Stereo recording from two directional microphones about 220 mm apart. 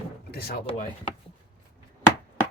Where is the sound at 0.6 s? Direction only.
35° left (ahead or behind).